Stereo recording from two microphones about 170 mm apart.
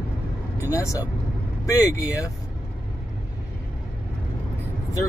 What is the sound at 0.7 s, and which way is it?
Speech, 20° left (ahead or behind).